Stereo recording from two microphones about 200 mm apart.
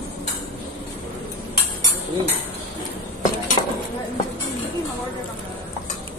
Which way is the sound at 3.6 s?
30° left (ahead or behind).